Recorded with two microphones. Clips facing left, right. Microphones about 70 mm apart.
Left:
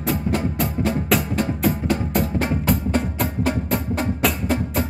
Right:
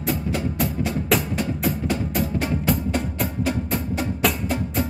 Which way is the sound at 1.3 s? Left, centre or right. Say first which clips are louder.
Left 3 dB; left.